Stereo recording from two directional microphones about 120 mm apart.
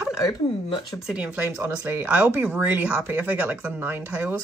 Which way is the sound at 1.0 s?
10° right (ahead or behind).